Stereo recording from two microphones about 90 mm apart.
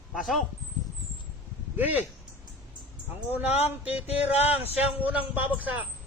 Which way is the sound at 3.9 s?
90° left.